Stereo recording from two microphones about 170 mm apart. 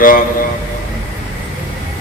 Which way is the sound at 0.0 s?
55° left (ahead or behind).